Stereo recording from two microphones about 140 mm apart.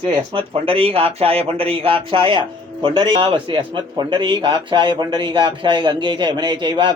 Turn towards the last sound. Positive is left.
turn(degrees=-35)  # may be behind; listen again after turning